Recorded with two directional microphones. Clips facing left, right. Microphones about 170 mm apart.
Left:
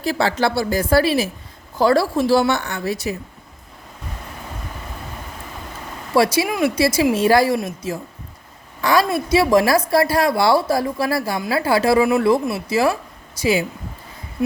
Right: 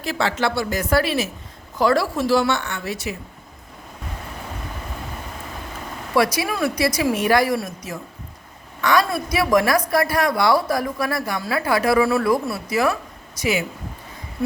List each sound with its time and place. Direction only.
0.0 s speech: 35° left (ahead or behind)
6.1 s a woman's voice: 25° left (ahead or behind)